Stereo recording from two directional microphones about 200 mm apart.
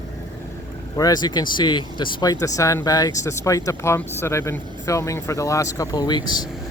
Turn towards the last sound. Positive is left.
turn(degrees=20)  # may be behind; listen again after turning